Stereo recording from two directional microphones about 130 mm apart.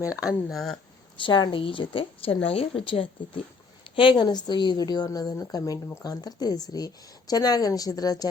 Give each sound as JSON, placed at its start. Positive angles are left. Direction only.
{"t": 0.1, "sound": "a woman's voice", "side_deg": 25}
{"t": 0.4, "sound": "speech", "side_deg": 0}
{"t": 1.1, "sound": "a woman's voice", "side_deg": 40}